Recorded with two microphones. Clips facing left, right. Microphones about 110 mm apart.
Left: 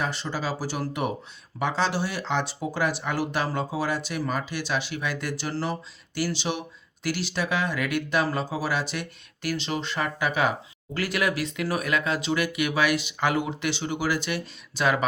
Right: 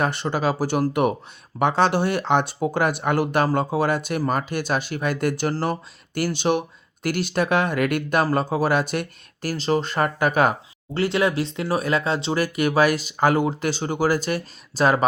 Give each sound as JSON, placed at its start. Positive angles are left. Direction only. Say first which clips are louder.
{"t": 0.0, "sound": "speech", "louder": "right 7 dB", "side_deg": -60}
{"t": 10.9, "sound": "speech", "louder": "right 6 dB", "side_deg": -25}